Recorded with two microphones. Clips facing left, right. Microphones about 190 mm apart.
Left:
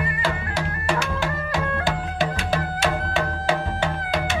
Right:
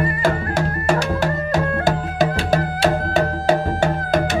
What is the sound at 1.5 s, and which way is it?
Music, 40° right (ahead or behind).